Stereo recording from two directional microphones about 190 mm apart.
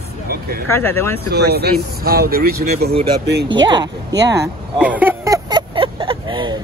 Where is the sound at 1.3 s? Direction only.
55° right (ahead or behind).